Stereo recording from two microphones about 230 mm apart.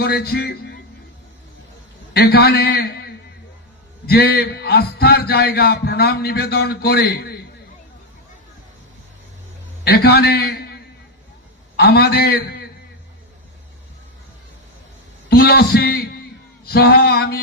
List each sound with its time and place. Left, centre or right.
0.0 s a man's voice: left
2.1 s a man's voice: left
9.8 s a man's voice: left
11.8 s a man's voice: left
15.3 s a man's voice: left